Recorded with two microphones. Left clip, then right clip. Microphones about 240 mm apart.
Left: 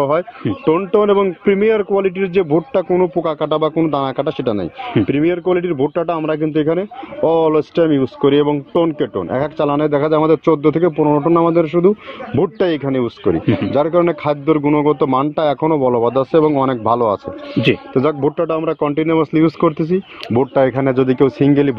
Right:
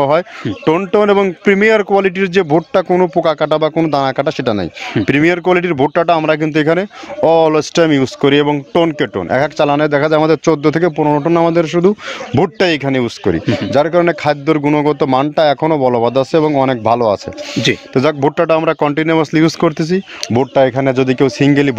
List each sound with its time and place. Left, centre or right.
0.7 s speech: right